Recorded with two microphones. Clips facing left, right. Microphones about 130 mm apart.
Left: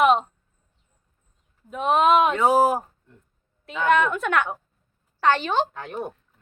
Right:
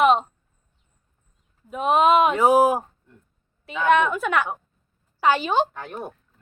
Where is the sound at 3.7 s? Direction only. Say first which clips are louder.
Right 1 dB; centre (ahead or behind).